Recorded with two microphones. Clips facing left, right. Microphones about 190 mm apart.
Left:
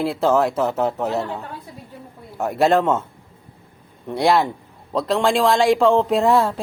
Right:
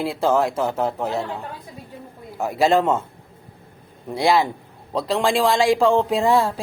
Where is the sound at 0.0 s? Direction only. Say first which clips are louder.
Left 2 dB; centre (ahead or behind).